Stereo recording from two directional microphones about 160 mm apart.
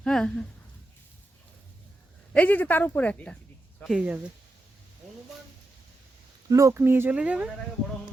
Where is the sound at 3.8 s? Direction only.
5° right (ahead or behind).